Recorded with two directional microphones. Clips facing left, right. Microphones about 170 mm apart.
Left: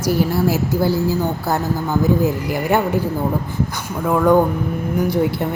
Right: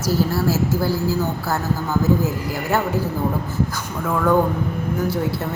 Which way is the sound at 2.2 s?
15° left (ahead or behind).